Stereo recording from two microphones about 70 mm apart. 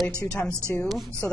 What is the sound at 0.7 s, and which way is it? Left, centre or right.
Speech, left.